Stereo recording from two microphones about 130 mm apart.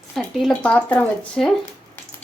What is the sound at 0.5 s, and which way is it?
Speech, 10° left (ahead or behind).